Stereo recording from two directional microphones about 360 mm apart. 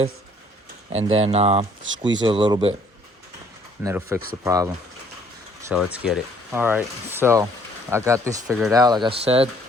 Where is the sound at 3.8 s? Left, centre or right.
Centre.